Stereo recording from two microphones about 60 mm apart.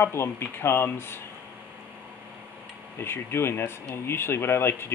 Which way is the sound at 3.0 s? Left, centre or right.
Left.